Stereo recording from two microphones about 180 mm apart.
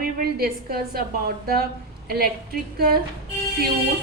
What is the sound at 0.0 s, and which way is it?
A woman's voice, 55° right (ahead or behind).